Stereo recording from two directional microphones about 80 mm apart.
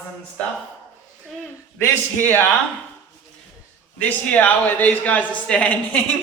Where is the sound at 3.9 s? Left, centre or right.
Centre.